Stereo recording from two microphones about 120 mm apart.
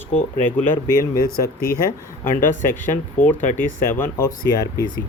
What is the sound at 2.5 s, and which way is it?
Speech, 90° left.